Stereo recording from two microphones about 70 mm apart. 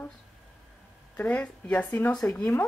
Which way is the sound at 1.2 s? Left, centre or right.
Centre.